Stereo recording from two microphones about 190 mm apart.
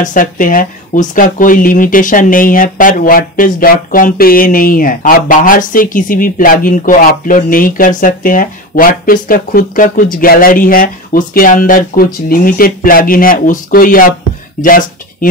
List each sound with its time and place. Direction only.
0.0 s speech: 45° left (ahead or behind)